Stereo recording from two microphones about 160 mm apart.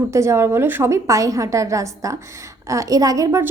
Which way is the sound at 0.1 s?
15° right (ahead or behind).